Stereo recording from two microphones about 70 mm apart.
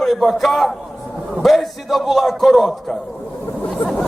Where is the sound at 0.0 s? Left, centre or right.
Centre.